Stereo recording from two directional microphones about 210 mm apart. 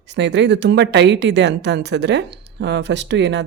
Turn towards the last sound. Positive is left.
turn(degrees=-55)  # may be behind; listen again after turning